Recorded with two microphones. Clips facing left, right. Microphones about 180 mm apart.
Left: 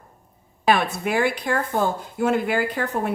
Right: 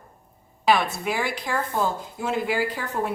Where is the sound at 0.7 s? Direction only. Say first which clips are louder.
Left 3 dB; 60° left (ahead or behind).